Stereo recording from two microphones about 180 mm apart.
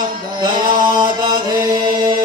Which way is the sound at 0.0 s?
25° right (ahead or behind).